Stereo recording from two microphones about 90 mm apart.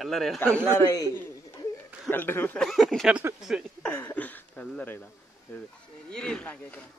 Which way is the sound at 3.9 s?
20° left (ahead or behind).